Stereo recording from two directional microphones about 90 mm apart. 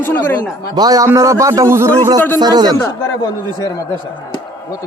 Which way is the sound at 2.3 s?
50° right (ahead or behind).